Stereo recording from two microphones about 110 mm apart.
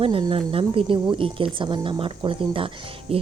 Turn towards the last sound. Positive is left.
turn(degrees=-55)  # may be behind; listen again after turning